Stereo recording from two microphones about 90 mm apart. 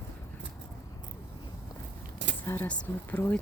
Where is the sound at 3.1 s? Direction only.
15° left (ahead or behind).